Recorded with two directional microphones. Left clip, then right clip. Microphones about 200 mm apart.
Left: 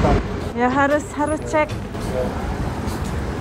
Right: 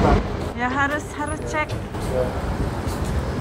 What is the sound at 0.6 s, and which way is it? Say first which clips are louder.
A woman's voice: left 5 dB; 10° right (ahead or behind).